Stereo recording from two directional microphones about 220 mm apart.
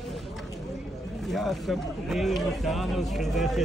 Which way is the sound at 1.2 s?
Centre (ahead or behind).